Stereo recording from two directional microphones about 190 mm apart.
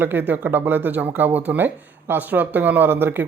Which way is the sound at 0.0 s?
10° right (ahead or behind).